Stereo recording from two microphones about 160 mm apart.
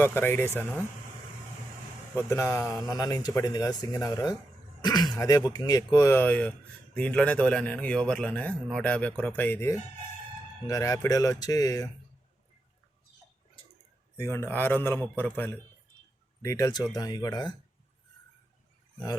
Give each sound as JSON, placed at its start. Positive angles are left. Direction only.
{"t": 0.0, "sound": "speech", "side_deg": 15}
{"t": 2.1, "sound": "speech", "side_deg": 15}
{"t": 14.2, "sound": "speech", "side_deg": 15}